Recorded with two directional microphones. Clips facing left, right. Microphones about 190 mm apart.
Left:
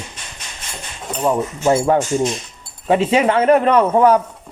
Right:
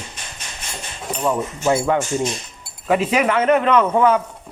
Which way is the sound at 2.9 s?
30° left (ahead or behind).